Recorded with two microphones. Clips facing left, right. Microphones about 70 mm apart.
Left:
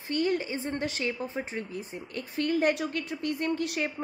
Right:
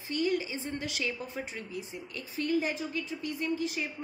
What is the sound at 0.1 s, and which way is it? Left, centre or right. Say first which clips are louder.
A woman's voice: left 2 dB; left.